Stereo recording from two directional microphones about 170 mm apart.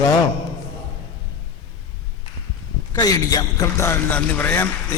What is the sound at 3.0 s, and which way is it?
A man's voice, 20° left (ahead or behind).